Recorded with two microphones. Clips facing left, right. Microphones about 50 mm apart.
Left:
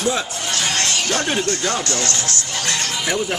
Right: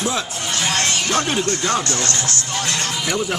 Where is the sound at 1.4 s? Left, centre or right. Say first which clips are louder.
Right 1 dB; right.